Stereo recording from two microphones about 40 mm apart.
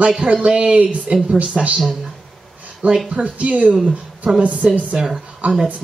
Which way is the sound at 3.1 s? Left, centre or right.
Right.